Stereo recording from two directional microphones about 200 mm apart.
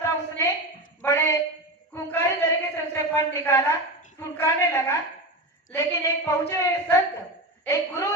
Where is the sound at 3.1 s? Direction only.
15° left (ahead or behind).